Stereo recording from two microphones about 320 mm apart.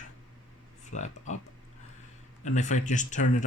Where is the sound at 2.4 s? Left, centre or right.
Left.